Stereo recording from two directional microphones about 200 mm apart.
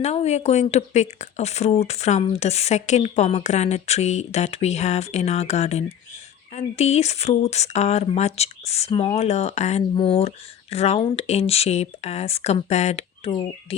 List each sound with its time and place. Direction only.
0.0 s speech: 35° left (ahead or behind)